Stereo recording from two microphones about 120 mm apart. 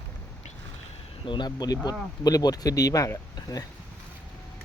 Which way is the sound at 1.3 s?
35° left (ahead or behind).